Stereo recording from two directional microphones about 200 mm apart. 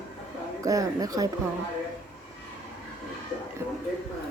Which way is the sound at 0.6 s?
15° right (ahead or behind).